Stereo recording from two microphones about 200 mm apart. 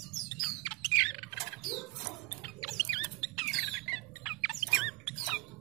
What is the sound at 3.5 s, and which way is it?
Squawk, centre (ahead or behind).